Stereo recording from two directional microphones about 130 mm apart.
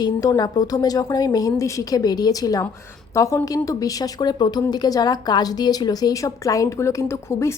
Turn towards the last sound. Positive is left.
turn(degrees=20)  # may be behind; listen again after turning